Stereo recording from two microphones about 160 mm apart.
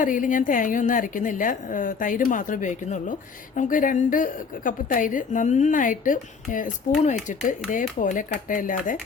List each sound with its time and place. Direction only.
0.0 s a woman's voice: 55° left (ahead or behind)